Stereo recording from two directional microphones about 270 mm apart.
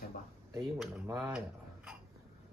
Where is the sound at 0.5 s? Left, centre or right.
Centre.